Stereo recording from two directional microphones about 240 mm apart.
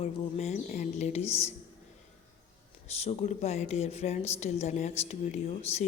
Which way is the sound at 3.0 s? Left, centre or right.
Left.